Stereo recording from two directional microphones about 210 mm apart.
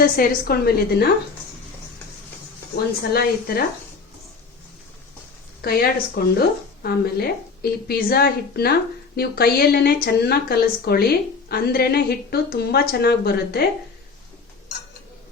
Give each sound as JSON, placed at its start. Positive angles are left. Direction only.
{"t": 0.0, "sound": "a woman's voice", "side_deg": 45}
{"t": 3.1, "sound": "a woman's voice", "side_deg": 45}
{"t": 5.6, "sound": "a woman's voice", "side_deg": 45}